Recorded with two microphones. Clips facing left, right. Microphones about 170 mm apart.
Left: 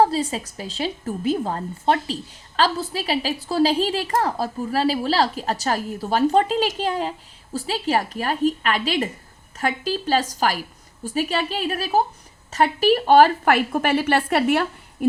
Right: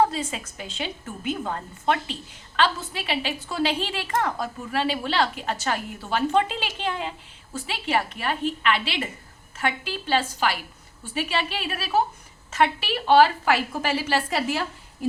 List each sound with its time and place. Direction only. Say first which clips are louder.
0.0 s a woman's voice: left 4 dB; 35° left (ahead or behind); by 14.7 s 60° left (ahead or behind)